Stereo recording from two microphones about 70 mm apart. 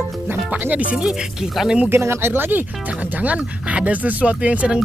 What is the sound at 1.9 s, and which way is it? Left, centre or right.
Speech, right.